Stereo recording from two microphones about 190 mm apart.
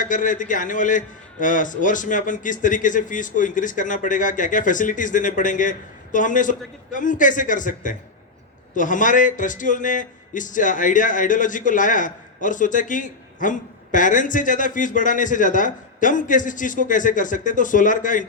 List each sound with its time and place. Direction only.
0.0 s a man's voice: 45° left (ahead or behind)